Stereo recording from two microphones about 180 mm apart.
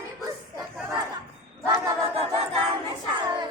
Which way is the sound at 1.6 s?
15° right (ahead or behind).